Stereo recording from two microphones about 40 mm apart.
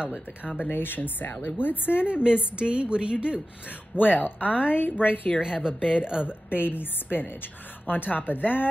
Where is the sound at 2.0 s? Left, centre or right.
Right.